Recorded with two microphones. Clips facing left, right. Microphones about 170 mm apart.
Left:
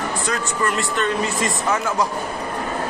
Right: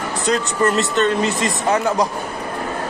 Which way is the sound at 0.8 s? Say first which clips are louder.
Right 4 dB; 20° right (ahead or behind).